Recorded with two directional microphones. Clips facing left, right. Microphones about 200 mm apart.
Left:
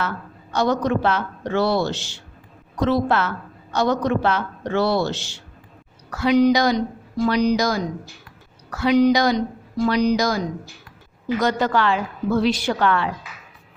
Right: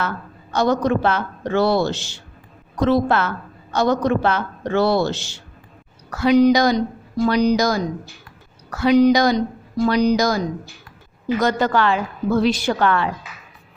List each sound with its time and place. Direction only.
0.5 s a woman's voice: 45° right (ahead or behind)